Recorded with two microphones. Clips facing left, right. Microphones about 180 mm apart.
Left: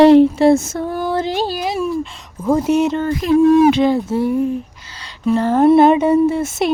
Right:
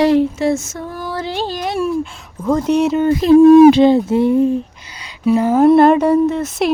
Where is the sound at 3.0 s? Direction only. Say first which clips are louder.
Right 8 dB; 30° right (ahead or behind).